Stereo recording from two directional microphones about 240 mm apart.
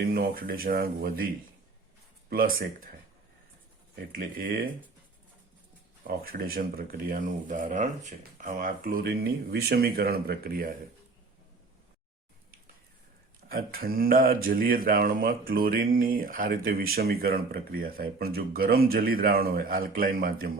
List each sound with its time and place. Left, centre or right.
0.0 s speech: right
2.3 s speech: right
4.1 s speech: right
6.1 s speech: right
13.5 s speech: right